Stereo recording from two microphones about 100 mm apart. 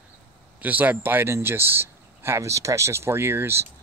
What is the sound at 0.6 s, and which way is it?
Speech, 15° right (ahead or behind).